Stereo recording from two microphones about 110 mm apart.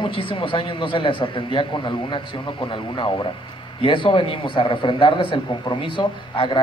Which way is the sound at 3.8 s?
50° left (ahead or behind).